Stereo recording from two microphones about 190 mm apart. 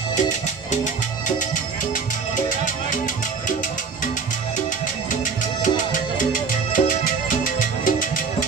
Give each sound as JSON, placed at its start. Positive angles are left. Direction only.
{"t": 6.1, "sound": "music", "side_deg": 45}